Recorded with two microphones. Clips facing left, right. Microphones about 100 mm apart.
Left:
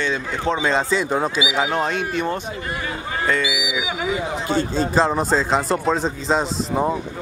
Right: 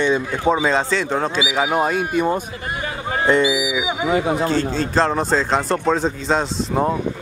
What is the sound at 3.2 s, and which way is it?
Speech, 20° right (ahead or behind).